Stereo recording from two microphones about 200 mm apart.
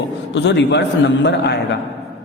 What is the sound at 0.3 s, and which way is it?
A man's voice, 60° left (ahead or behind).